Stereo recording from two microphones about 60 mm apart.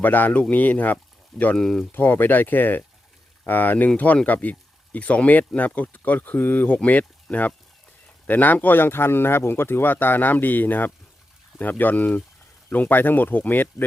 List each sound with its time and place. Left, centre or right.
0.0 s speech: left
1.5 s speech: centre
1.9 s speech: left